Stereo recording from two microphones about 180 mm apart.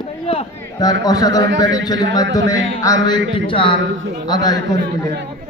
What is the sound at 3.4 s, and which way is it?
A man's voice, 30° left (ahead or behind).